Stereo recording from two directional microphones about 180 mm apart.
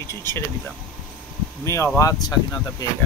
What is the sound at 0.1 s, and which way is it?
Speech, 15° left (ahead or behind).